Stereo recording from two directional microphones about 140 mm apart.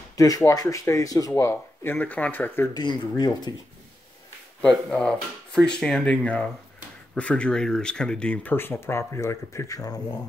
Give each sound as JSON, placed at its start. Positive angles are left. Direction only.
{"t": 0.1, "sound": "speech", "side_deg": 25}
{"t": 2.7, "sound": "speech", "side_deg": 30}
{"t": 4.6, "sound": "speech", "side_deg": 5}